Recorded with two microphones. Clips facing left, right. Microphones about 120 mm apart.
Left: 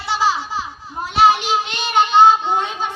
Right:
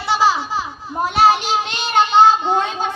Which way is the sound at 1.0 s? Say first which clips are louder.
Even; 40° right (ahead or behind).